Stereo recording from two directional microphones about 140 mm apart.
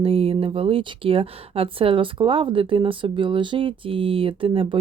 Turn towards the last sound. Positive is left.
turn(degrees=-40)  # may be behind; listen again after turning